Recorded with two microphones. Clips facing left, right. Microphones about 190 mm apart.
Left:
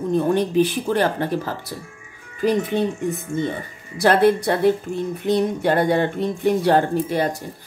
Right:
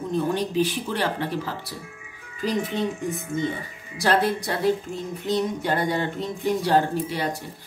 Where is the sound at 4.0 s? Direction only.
60° left (ahead or behind).